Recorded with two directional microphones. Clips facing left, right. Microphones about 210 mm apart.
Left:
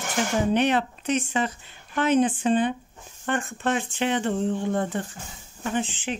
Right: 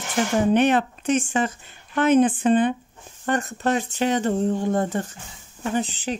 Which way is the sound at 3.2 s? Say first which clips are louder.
Right 3 dB; 40° right (ahead or behind).